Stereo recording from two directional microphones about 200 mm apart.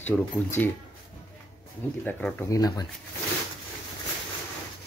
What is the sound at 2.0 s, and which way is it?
Speech, 5° left (ahead or behind).